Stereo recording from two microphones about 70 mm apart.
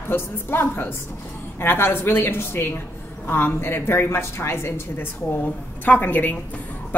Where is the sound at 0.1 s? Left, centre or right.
Left.